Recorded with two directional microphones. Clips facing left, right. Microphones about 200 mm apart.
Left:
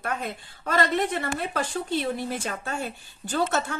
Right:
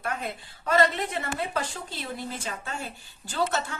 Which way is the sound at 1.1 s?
50° left (ahead or behind).